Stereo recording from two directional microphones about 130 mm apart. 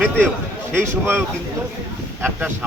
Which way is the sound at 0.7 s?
15° right (ahead or behind).